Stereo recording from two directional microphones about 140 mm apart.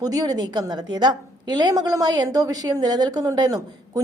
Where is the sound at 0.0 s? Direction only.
25° right (ahead or behind).